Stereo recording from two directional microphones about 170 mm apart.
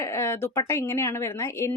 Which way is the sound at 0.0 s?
15° left (ahead or behind).